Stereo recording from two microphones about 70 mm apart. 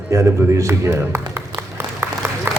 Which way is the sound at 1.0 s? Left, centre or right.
Right.